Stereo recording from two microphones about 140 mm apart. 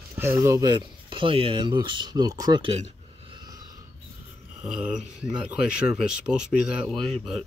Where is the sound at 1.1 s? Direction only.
40° right (ahead or behind).